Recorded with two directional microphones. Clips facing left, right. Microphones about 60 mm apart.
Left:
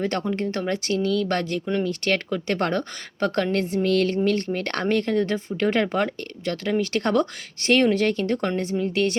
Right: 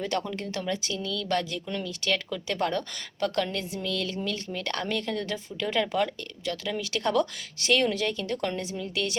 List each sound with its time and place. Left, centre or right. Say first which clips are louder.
0.0 s speech: left 5 dB; left
0.7 s speech: left 9 dB; left